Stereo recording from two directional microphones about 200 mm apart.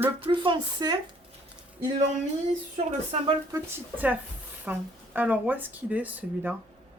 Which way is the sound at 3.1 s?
30° right (ahead or behind).